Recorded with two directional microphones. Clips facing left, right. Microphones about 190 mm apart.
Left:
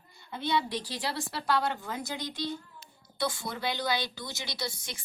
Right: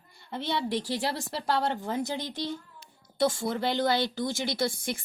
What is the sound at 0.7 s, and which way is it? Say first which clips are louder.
A woman's voice: right 5 dB; 25° right (ahead or behind).